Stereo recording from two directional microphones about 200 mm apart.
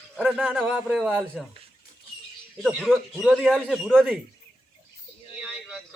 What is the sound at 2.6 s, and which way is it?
Speech, centre (ahead or behind).